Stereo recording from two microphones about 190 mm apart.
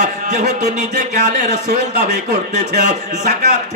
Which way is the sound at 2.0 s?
60° right (ahead or behind).